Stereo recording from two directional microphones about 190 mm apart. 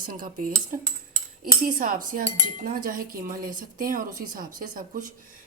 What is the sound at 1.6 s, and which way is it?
Cutlery, 45° right (ahead or behind).